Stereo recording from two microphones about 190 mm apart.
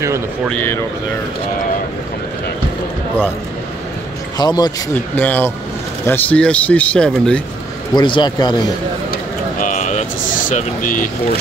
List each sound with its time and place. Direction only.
0.5 s speech: 10° left (ahead or behind)
4.4 s speech: 20° left (ahead or behind)
5.1 s speech: 10° left (ahead or behind)
7.9 s speech: 25° left (ahead or behind)
9.1 s a sound: 45° left (ahead or behind)